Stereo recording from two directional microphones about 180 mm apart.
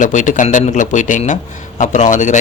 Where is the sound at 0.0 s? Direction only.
45° left (ahead or behind).